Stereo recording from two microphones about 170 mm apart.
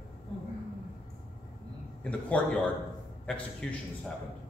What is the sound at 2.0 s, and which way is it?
Speech, 5° left (ahead or behind).